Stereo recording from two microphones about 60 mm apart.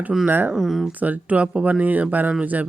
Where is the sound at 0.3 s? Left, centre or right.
Right.